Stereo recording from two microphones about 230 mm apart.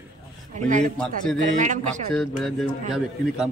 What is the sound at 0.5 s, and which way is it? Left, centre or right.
A man's voice, right.